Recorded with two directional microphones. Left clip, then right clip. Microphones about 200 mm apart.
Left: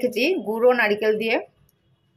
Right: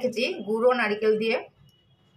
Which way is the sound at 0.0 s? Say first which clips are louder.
Left 5 dB; 35° left (ahead or behind).